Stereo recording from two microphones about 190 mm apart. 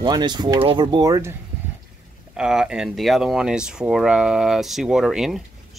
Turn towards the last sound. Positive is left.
turn(degrees=-5)  # may be behind; listen again after turning